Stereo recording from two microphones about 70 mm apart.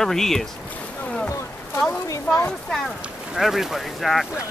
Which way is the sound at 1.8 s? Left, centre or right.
Left.